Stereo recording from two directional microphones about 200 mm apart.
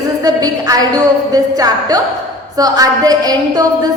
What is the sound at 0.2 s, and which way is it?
A woman's voice, 20° right (ahead or behind).